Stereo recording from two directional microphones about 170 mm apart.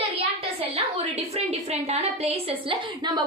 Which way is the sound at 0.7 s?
35° right (ahead or behind).